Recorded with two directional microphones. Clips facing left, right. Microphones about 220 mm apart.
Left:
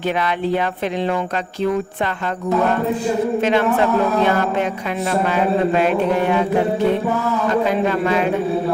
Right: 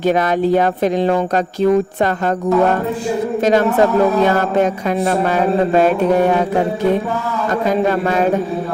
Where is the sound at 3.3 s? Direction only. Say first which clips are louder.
Right 7 dB; 40° right (ahead or behind).